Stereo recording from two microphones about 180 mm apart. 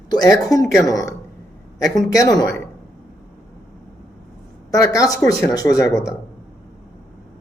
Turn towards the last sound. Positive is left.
turn(degrees=15)  # may be behind; listen again after turning